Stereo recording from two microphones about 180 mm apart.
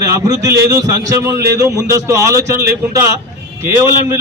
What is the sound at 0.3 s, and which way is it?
A man's voice, 20° right (ahead or behind).